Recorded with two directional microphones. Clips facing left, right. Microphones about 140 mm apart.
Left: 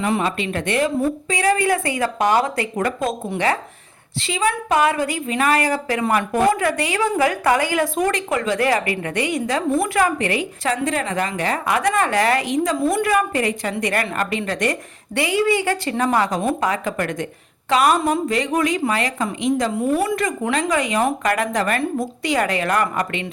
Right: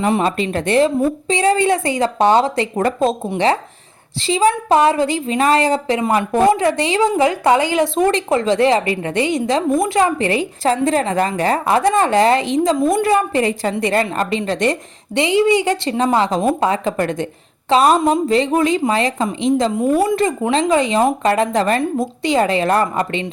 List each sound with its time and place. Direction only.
0.0 s a woman's voice: 30° right (ahead or behind); by 9.9 s 15° right (ahead or behind)
9.9 s a woman's voice: 25° right (ahead or behind)